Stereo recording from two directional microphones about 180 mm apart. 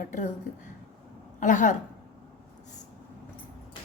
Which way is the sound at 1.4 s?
45° left (ahead or behind).